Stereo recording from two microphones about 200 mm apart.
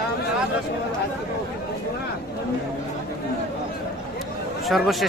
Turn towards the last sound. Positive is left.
turn(degrees=0)  # may be behind; listen again after turning